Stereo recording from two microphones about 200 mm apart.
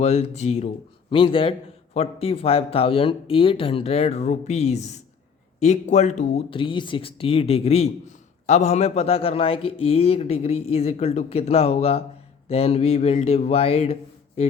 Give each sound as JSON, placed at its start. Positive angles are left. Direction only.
{"t": 0.0, "sound": "a man's voice", "side_deg": 30}